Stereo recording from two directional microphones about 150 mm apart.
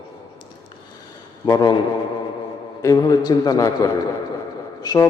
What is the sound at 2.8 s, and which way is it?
Speech, 25° left (ahead or behind).